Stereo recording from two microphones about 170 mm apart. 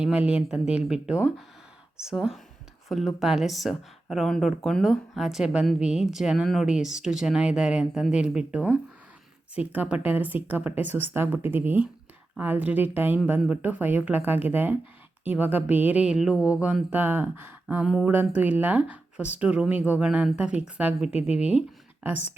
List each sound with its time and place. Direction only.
0.0 s a woman's voice: 5° right (ahead or behind)
21.1 s speech: 40° left (ahead or behind)